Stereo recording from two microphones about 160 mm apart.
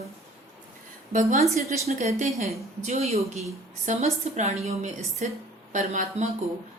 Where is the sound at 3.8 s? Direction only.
45° right (ahead or behind).